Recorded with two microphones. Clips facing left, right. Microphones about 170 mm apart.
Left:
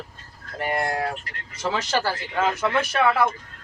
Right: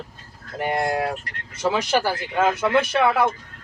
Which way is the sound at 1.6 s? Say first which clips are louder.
Right 3 dB; 15° right (ahead or behind).